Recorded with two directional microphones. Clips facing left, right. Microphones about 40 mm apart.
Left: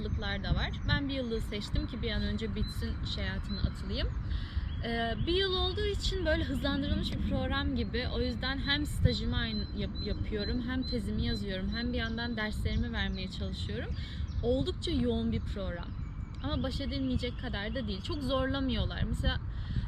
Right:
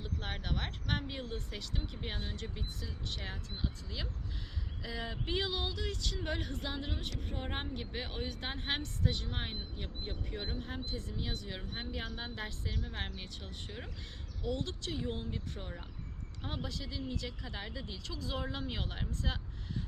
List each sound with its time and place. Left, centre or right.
0.0 s speech: left